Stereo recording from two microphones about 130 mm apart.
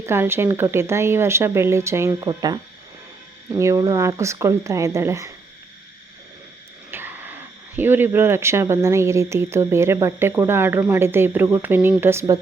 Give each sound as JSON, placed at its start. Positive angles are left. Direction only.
{"t": 0.0, "sound": "speech", "side_deg": -20}
{"t": 6.9, "sound": "speech", "side_deg": -15}